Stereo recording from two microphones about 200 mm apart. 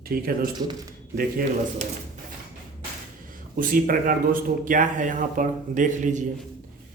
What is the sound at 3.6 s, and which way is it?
Speech, 45° right (ahead or behind).